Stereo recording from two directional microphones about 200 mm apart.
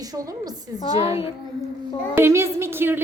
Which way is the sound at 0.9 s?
25° left (ahead or behind).